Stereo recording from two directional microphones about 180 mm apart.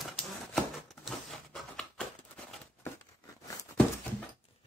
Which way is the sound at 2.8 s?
20° left (ahead or behind).